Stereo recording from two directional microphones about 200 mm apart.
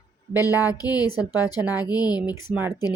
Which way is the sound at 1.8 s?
20° left (ahead or behind).